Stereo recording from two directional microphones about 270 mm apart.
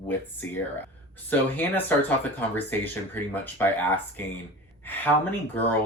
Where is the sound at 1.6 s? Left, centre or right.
Centre.